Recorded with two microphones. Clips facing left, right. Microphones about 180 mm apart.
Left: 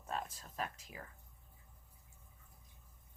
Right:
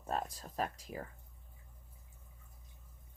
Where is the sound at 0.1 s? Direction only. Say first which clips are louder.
Right 4 dB; 40° right (ahead or behind).